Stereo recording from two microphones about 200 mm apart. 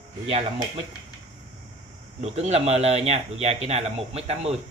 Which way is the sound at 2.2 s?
30° right (ahead or behind).